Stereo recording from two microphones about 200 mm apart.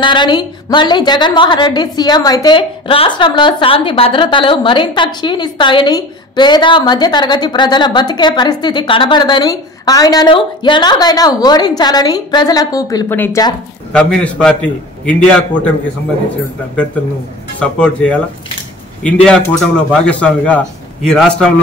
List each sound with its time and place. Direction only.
0.0 s a woman's voice: 25° left (ahead or behind); by 15.7 s 5° left (ahead or behind)
17.6 s speech: 5° left (ahead or behind)
19.2 s a man's voice: 5° left (ahead or behind)